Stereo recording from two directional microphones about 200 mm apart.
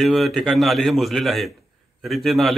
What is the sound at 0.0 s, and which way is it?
Speech, centre (ahead or behind).